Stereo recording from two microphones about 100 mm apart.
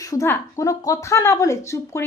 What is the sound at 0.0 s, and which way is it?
A woman's voice, 35° left (ahead or behind).